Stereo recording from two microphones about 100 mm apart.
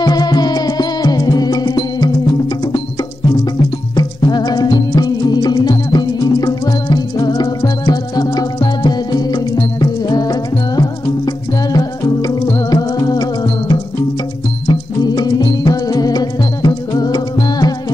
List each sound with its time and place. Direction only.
0.0 s music: 40° left (ahead or behind)
3.9 s music: 45° left (ahead or behind)